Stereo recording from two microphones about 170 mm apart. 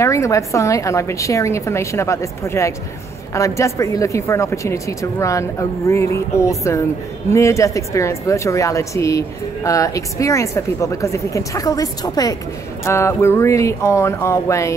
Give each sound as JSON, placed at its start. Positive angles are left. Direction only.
{"t": 0.0, "sound": "a woman's voice", "side_deg": 15}